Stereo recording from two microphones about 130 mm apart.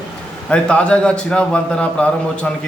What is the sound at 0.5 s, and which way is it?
A man's voice, 10° left (ahead or behind).